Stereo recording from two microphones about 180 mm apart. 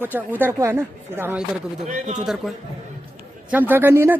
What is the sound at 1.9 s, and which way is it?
Speech, 40° right (ahead or behind).